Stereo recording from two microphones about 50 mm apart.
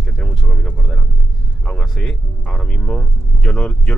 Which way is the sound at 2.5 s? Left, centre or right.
Centre.